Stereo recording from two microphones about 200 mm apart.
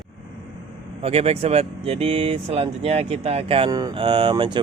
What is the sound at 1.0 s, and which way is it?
Speech, 30° right (ahead or behind).